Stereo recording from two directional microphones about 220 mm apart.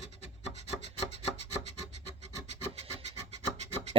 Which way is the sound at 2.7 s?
25° right (ahead or behind).